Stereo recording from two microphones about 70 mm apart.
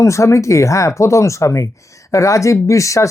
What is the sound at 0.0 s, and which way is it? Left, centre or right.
Speech, left.